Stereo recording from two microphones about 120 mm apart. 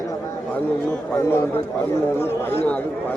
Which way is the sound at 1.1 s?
20° left (ahead or behind).